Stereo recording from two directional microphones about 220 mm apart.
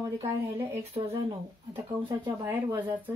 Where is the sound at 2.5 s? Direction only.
10° right (ahead or behind).